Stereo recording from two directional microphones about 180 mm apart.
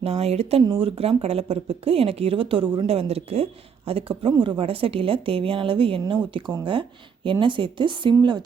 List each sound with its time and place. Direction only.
0.0 s speech: 35° right (ahead or behind)